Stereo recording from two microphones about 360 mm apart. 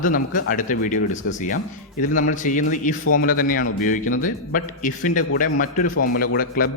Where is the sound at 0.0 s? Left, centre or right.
Left.